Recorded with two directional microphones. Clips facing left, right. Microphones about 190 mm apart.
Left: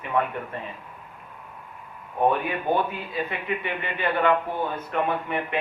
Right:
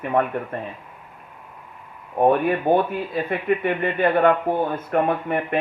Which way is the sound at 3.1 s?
50° right (ahead or behind).